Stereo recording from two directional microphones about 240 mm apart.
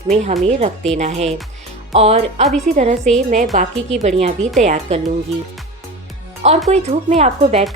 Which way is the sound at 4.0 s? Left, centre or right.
Right.